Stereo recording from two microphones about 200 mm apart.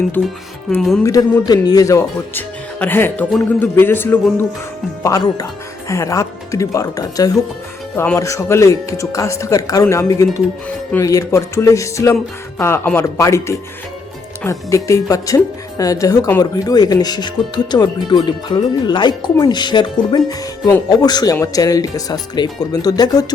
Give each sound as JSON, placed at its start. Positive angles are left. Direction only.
{"t": 0.2, "sound": "speech", "side_deg": 5}
{"t": 1.0, "sound": "speech", "side_deg": 20}